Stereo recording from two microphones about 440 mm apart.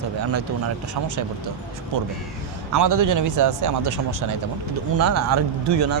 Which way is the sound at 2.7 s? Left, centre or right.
Right.